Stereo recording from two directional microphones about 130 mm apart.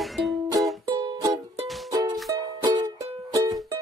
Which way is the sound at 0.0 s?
Centre (ahead or behind).